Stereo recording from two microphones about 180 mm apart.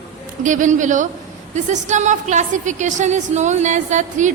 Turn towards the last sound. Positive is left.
turn(degrees=-40)  # may be behind; listen again after turning